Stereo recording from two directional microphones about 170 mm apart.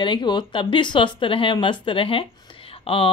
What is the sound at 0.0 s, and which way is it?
Speech, 25° left (ahead or behind).